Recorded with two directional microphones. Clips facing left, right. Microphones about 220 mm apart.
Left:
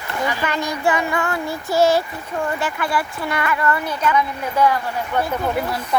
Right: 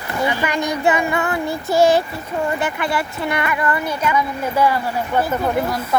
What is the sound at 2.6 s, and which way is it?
Speech, 20° right (ahead or behind).